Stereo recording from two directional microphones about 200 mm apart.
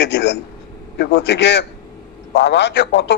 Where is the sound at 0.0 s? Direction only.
60° left (ahead or behind).